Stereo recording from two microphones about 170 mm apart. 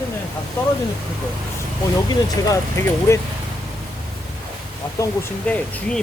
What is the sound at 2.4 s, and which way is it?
Speech, 20° left (ahead or behind).